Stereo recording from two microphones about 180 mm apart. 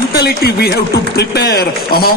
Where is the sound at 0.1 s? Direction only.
60° left (ahead or behind).